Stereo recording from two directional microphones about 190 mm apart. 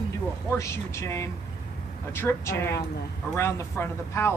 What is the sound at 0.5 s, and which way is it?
Speech, 15° left (ahead or behind).